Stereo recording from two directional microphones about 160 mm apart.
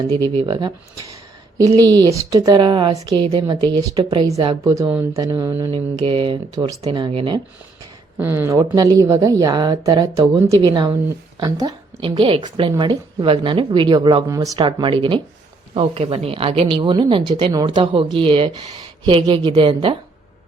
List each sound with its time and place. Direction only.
0.1 s a woman's voice: 35° right (ahead or behind)
4.4 s a woman's voice: 20° right (ahead or behind)
5.7 s a woman's voice: 30° right (ahead or behind)
8.2 s a woman's voice: 15° right (ahead or behind); by 14.3 s 30° right (ahead or behind)
14.3 s a woman's voice: 20° right (ahead or behind)